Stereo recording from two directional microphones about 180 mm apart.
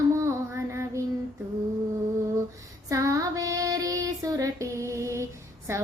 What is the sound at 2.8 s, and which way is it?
Child singing, 20° right (ahead or behind).